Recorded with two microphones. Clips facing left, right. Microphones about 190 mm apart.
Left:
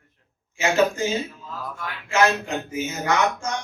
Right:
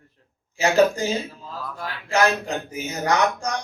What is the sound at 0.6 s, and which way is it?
A man's voice, 35° right (ahead or behind).